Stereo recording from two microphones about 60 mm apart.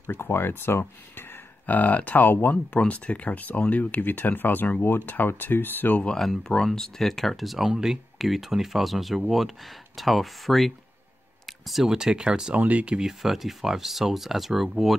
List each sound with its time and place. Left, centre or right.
0.0 s speech: left
6.4 s speech: centre
12.5 s speech: right
13.2 s speech: centre